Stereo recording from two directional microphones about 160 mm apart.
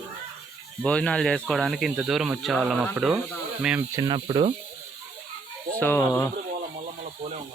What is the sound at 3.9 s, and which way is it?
Speech, 30° right (ahead or behind).